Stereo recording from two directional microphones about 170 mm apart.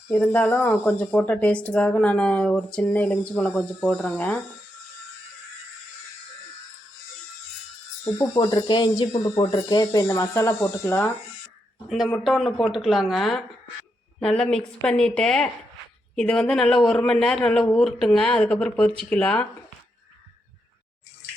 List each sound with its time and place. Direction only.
0.1 s speech: 10° left (ahead or behind)
8.4 s speech: 25° left (ahead or behind)
12.1 s speech: centre (ahead or behind)